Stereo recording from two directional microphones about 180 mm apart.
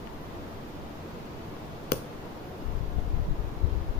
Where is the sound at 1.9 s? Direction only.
55° left (ahead or behind).